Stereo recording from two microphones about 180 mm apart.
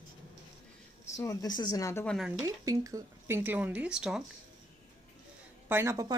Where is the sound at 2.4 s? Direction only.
20° right (ahead or behind).